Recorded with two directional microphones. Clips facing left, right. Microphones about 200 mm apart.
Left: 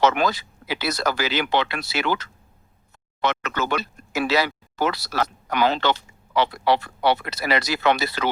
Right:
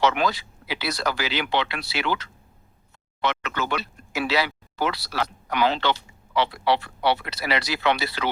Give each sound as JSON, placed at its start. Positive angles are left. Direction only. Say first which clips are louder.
{"t": 0.0, "sound": "speech", "louder": "left 2 dB", "side_deg": 45}